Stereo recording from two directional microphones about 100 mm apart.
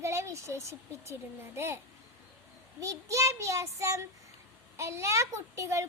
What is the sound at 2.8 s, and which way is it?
A child's voice, 35° right (ahead or behind).